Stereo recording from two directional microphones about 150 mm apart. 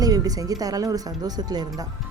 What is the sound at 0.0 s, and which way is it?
A woman's voice, 25° right (ahead or behind).